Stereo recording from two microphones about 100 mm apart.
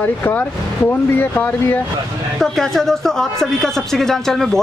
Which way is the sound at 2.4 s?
5° left (ahead or behind).